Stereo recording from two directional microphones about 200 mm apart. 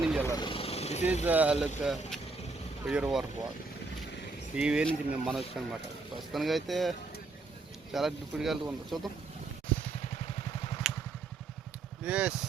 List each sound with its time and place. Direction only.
0.0 s vehicle: 5° right (ahead or behind)
0.3 s vehicle: 25° left (ahead or behind)
1.2 s speech: 10° right (ahead or behind)
4.5 s speech: 5° right (ahead or behind)
7.9 s speech: centre (ahead or behind)
10.8 s vehicle: centre (ahead or behind)
12.0 s speech: 5° right (ahead or behind)